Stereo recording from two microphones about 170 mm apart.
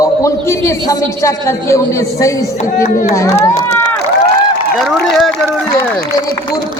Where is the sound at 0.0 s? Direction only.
20° left (ahead or behind).